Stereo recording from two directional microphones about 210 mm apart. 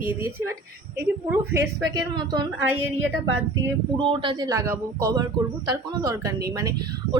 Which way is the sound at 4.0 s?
25° right (ahead or behind).